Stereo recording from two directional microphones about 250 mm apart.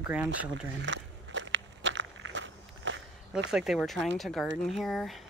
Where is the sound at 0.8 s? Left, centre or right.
Right.